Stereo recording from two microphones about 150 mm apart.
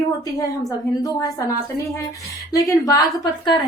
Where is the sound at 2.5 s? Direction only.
25° left (ahead or behind).